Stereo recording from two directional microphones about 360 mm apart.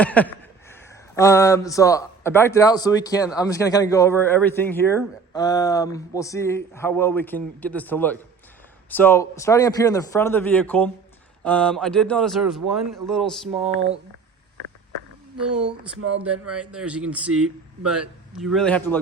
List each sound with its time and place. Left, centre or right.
0.0 s a man's voice: centre
13.6 s speech: centre
15.4 s a man's voice: centre
17.3 s speech: right
18.3 s a man's voice: centre